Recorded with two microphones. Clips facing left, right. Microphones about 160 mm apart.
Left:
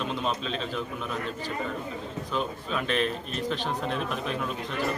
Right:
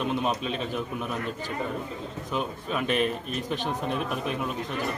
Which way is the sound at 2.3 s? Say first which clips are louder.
Right 1 dB; 10° right (ahead or behind).